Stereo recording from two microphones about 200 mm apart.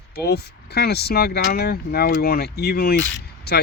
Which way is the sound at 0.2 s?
55° left (ahead or behind).